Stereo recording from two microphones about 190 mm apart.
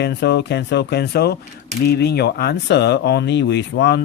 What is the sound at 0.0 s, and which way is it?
Speech, 65° left (ahead or behind).